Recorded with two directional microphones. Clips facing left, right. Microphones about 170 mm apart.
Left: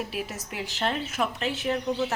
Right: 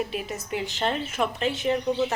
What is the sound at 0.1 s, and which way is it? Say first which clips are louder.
A woman's voice: right 4 dB; centre (ahead or behind).